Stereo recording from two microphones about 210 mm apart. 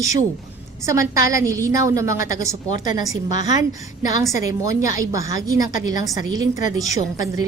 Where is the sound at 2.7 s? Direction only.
35° left (ahead or behind).